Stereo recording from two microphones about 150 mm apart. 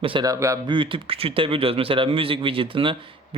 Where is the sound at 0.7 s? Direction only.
35° right (ahead or behind).